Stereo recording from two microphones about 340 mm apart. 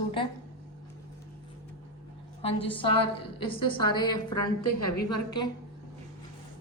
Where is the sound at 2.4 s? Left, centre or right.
Centre.